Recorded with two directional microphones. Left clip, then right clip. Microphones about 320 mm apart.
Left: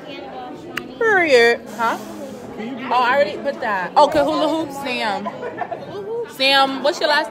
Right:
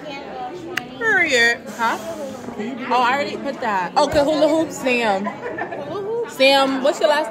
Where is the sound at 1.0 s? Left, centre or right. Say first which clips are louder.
Left 3 dB; left.